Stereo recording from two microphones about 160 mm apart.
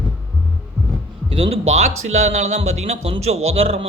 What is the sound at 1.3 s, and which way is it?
Speech, 35° right (ahead or behind).